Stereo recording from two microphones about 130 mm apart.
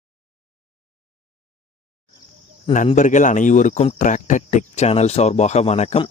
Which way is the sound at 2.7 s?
70° left (ahead or behind).